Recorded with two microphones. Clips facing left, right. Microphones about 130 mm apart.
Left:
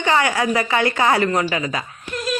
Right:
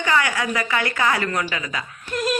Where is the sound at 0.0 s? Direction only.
25° left (ahead or behind).